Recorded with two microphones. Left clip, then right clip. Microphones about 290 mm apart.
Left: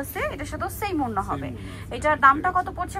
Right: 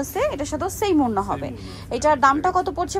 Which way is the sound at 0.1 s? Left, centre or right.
Centre.